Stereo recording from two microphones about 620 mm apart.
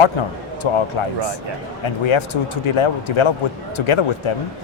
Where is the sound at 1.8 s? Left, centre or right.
Left.